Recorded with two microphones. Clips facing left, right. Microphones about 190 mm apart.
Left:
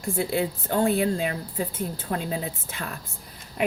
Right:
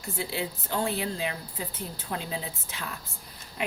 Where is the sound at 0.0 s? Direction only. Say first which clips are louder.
Left 7 dB; 50° left (ahead or behind).